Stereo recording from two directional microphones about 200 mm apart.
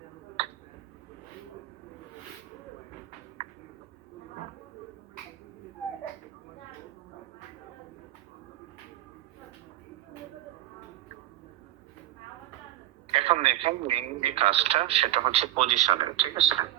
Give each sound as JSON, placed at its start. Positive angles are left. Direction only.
{"t": 13.1, "sound": "a man's voice", "side_deg": -30}
{"t": 16.0, "sound": "speech", "side_deg": -20}